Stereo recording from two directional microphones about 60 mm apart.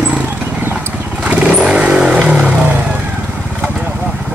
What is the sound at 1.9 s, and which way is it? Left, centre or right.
Vehicle, centre.